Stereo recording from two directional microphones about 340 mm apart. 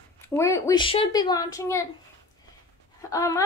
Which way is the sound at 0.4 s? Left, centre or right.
Centre.